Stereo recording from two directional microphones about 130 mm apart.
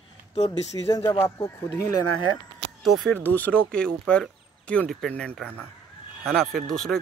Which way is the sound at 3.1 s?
15° left (ahead or behind).